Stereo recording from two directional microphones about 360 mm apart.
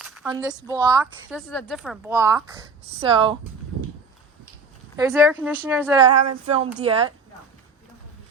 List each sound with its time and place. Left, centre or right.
0.0 s a woman's voice: centre
1.4 s a woman's voice: centre
4.9 s speech: centre
6.1 s a woman's voice: centre